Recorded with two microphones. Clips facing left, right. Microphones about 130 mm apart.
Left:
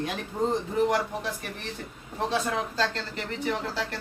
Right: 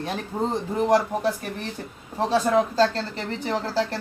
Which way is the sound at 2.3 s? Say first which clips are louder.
Right 10 dB; 40° right (ahead or behind).